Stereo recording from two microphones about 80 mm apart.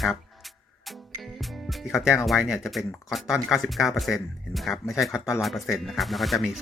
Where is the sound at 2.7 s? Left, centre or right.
Centre.